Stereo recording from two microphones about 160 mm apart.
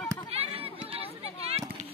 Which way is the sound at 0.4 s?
35° right (ahead or behind).